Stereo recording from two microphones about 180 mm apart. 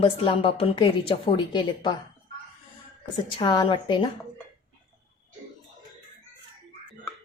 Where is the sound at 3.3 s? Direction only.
20° left (ahead or behind).